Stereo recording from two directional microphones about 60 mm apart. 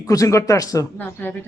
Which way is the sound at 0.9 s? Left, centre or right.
Left.